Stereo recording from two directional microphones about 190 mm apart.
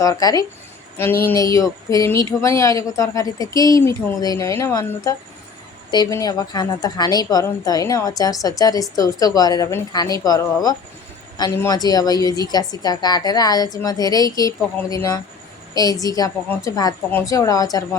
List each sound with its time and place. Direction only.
0.0 s a woman's voice: 20° left (ahead or behind)